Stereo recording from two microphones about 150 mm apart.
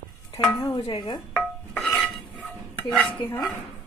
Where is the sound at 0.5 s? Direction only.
25° left (ahead or behind).